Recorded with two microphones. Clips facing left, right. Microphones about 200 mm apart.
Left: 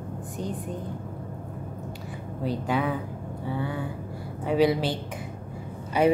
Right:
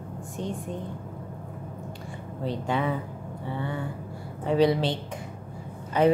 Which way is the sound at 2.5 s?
5° left (ahead or behind).